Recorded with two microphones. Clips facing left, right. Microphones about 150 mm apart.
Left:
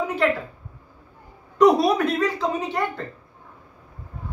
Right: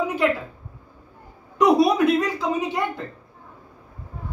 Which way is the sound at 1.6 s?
10° right (ahead or behind).